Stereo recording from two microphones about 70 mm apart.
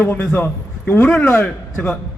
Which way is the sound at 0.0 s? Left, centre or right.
Left.